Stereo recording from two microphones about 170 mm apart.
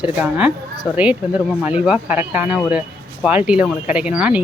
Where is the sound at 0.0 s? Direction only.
5° right (ahead or behind).